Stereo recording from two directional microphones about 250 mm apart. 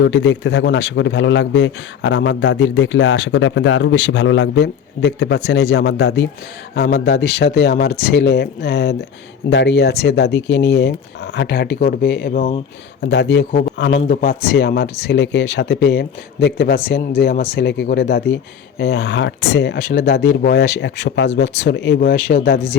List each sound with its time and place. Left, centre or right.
0.0 s a man's voice: left
13.0 s a man's voice: left
13.5 s speech: left
13.7 s a man's voice: left